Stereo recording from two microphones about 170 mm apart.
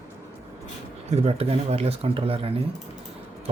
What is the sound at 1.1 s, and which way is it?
Speech, 35° right (ahead or behind).